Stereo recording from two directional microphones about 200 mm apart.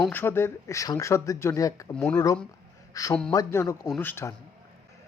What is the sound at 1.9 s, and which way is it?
Speech, 5° left (ahead or behind).